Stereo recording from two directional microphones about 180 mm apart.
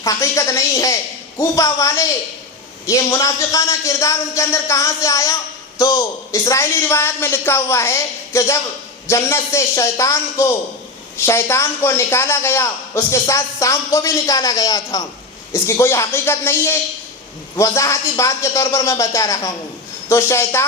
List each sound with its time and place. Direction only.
0.0 s a man's voice: 15° left (ahead or behind)